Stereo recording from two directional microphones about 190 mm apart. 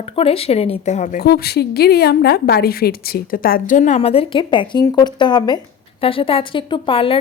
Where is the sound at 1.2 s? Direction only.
55° left (ahead or behind).